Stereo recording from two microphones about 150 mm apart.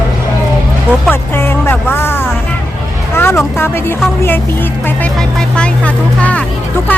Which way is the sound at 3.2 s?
15° left (ahead or behind).